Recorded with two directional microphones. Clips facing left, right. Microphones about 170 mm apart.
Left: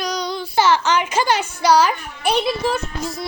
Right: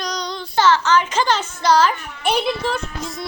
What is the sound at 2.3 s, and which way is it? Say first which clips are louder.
Speech: left 1 dB; centre (ahead or behind).